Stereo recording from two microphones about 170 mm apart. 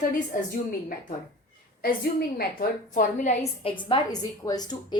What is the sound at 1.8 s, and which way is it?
A woman's voice, 65° left (ahead or behind).